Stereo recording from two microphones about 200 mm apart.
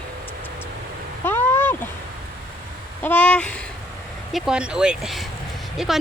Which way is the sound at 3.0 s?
5° left (ahead or behind).